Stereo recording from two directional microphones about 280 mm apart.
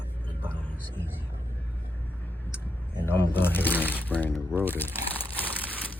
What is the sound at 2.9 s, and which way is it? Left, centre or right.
Speech, centre.